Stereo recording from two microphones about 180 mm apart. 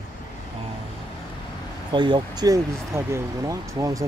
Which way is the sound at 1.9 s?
25° right (ahead or behind).